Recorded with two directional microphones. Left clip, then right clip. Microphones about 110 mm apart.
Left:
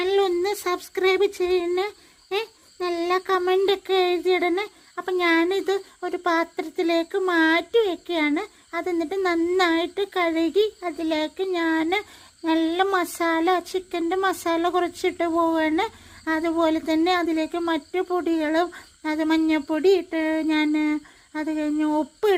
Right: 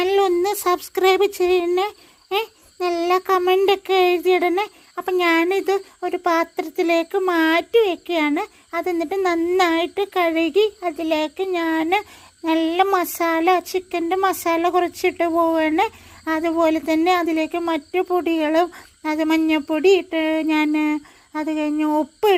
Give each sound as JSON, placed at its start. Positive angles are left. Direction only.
{"t": 0.0, "sound": "speech", "side_deg": -25}